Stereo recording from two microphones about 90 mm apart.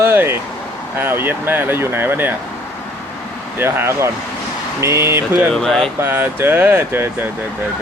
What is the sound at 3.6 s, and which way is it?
Speech, 25° right (ahead or behind).